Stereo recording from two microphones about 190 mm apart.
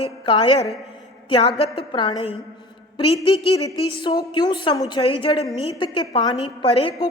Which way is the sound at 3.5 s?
20° left (ahead or behind).